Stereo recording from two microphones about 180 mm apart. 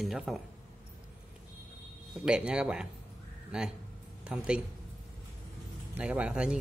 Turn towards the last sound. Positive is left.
turn(degrees=-5)  # may be behind; listen again after turning